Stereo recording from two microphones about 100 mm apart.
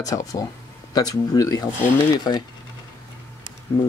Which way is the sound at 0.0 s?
35° left (ahead or behind).